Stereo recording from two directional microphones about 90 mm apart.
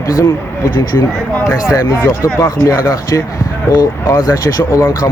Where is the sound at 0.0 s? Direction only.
35° left (ahead or behind).